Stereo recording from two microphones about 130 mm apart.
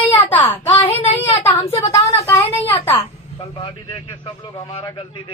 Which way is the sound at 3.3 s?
45° left (ahead or behind).